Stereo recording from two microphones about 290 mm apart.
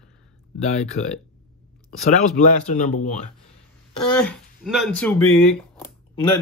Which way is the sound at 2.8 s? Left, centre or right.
Left.